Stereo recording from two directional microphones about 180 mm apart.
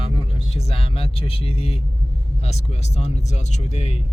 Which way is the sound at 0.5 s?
35° left (ahead or behind).